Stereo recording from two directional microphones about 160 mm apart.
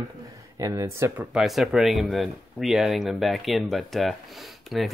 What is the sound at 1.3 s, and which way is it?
Speech, centre (ahead or behind).